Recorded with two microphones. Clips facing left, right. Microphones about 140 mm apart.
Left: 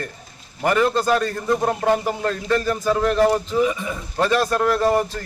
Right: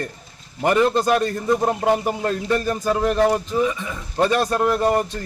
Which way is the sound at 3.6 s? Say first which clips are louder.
Left 1 dB; 15° left (ahead or behind).